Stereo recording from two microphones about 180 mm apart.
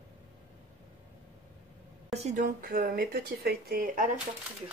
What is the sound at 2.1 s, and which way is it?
Speech, 40° right (ahead or behind).